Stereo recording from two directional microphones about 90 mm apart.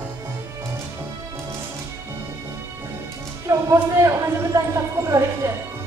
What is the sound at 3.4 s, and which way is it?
Speech, 35° right (ahead or behind).